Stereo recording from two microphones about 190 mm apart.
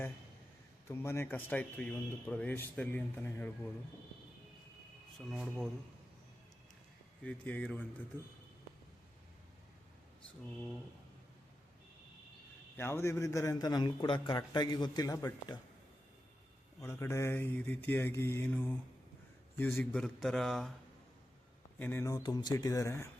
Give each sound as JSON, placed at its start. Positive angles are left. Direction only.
{"t": 0.9, "sound": "speech", "side_deg": 15}
{"t": 5.1, "sound": "a man's voice", "side_deg": 0}
{"t": 7.3, "sound": "speech", "side_deg": 5}
{"t": 12.7, "sound": "a man's voice", "side_deg": 15}
{"t": 16.8, "sound": "a man's voice", "side_deg": 15}
{"t": 21.8, "sound": "speech", "side_deg": 10}